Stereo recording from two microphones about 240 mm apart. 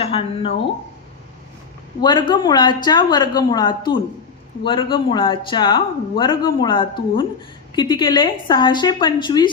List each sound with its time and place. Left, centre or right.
0.0 s speech: left
2.0 s a woman's voice: centre